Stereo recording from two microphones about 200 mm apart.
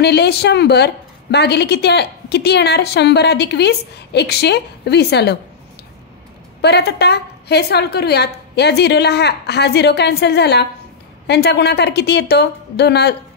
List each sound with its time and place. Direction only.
0.0 s a woman's voice: 55° left (ahead or behind)
6.6 s a woman's voice: 55° left (ahead or behind)